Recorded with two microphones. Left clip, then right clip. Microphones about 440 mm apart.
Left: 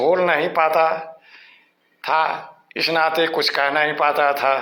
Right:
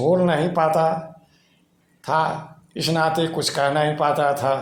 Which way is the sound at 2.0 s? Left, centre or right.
Centre.